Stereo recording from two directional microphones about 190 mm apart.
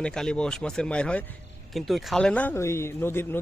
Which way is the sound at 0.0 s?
5° left (ahead or behind).